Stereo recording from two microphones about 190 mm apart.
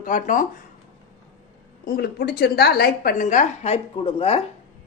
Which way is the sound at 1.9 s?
55° left (ahead or behind).